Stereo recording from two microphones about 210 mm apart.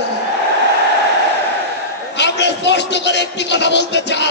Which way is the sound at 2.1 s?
55° left (ahead or behind).